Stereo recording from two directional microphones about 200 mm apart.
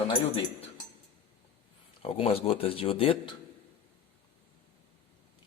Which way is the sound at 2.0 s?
30° left (ahead or behind).